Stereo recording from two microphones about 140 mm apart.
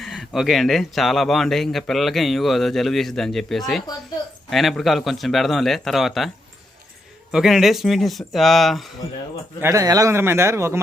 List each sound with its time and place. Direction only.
0.0 s speech: centre (ahead or behind)
9.6 s a man's voice: 20° right (ahead or behind)